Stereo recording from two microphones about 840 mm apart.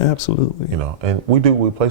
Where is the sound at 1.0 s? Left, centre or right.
Right.